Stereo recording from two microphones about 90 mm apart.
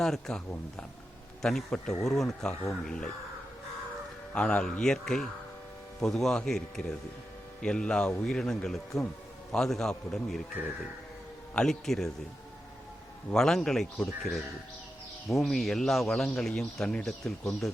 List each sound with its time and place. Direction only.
0.0 s speech: 5° left (ahead or behind)
4.4 s speech: 10° left (ahead or behind)
11.5 s speech: 5° left (ahead or behind)
13.3 s speech: 5° left (ahead or behind)